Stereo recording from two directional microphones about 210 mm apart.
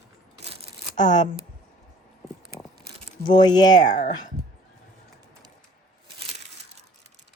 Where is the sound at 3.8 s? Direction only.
35° left (ahead or behind).